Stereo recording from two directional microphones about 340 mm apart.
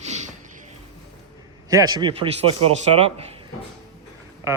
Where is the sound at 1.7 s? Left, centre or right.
Centre.